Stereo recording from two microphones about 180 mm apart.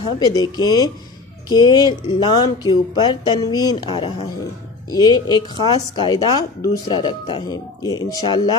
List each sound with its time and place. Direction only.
0.0 s speech: 20° left (ahead or behind)